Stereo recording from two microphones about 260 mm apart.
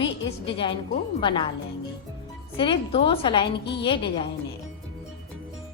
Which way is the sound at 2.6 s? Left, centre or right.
Centre.